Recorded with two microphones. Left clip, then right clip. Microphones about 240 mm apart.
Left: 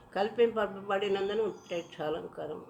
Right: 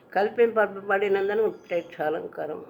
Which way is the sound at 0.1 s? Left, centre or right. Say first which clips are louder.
Right 6 dB; centre.